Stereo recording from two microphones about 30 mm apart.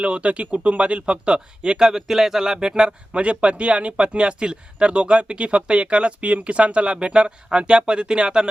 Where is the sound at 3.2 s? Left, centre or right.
Right.